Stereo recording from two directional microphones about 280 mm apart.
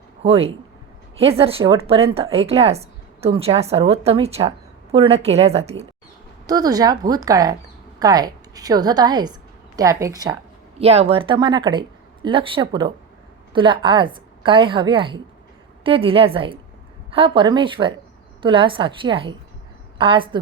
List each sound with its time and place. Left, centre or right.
0.2 s a woman's voice: right